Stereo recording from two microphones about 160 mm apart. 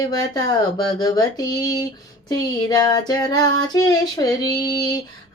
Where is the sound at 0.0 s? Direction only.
25° left (ahead or behind).